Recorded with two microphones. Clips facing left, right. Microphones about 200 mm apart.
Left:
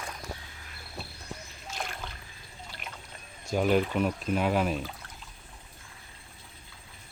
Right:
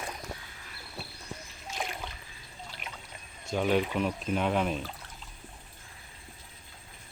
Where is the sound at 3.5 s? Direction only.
5° left (ahead or behind).